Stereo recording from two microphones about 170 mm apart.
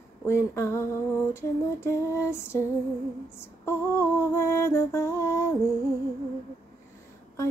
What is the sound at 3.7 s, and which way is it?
Speech, 15° left (ahead or behind).